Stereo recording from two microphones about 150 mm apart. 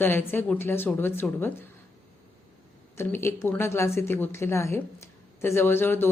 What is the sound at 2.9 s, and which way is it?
A woman's voice, 15° left (ahead or behind).